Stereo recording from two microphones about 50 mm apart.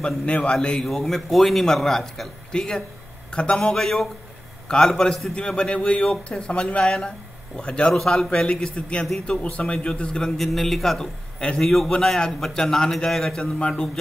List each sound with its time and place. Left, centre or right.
0.5 s a man's voice: centre
0.8 s a man's voice: centre
3.7 s a man's voice: centre
5.3 s a man's voice: centre
8.3 s a man's voice: left
10.3 s a man's voice: centre